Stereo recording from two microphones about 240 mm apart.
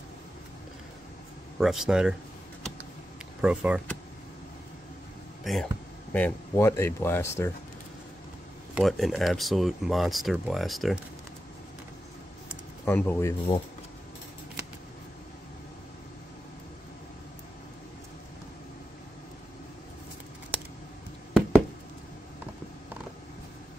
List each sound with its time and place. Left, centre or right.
1.6 s speech: centre
3.3 s speech: centre
5.4 s speech: centre
8.7 s speech: centre
12.8 s speech: centre
13.5 s speech: left
21.3 s knock: centre